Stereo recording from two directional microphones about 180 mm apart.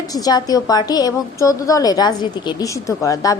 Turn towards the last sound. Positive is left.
turn(degrees=20)  # may be behind; listen again after turning